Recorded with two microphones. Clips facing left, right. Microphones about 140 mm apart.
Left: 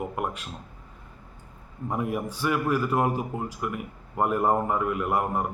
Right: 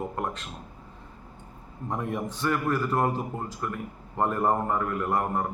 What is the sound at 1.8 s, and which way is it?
A man's voice, 10° left (ahead or behind).